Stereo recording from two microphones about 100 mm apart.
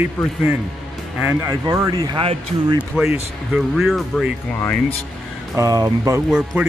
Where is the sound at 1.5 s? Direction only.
35° right (ahead or behind).